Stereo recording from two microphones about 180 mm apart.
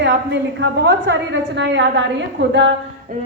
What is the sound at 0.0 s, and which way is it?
A woman's voice, 85° right.